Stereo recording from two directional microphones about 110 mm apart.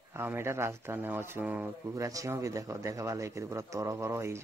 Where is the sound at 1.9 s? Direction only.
30° right (ahead or behind).